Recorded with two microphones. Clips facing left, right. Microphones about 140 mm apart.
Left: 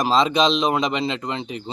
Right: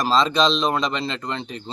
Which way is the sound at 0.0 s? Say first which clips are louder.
Left 1 dB; 15° left (ahead or behind).